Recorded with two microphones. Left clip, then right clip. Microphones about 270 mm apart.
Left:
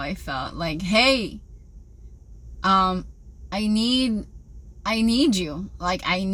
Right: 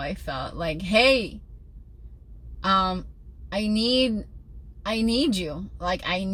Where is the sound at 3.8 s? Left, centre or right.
Centre.